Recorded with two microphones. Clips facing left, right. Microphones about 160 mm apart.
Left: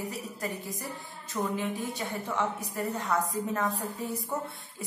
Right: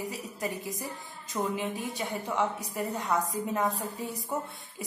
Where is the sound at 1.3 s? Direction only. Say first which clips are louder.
Even; 15° right (ahead or behind).